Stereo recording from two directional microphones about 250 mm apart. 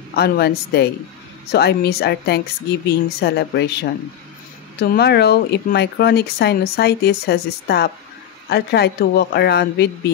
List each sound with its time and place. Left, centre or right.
0.1 s speech: left